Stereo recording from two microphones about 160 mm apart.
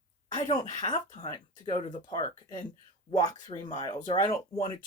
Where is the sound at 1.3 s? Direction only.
25° left (ahead or behind).